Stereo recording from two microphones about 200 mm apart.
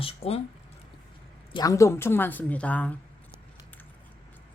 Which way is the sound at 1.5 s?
15° left (ahead or behind).